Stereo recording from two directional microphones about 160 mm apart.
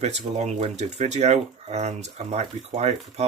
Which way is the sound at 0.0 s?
45° right (ahead or behind).